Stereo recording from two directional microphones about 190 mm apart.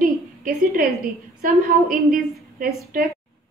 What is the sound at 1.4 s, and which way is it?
A woman's voice, 50° right (ahead or behind).